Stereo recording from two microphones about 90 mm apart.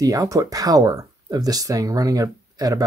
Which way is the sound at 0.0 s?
40° right (ahead or behind).